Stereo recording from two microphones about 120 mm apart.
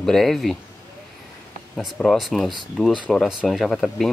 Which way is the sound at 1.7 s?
5° left (ahead or behind).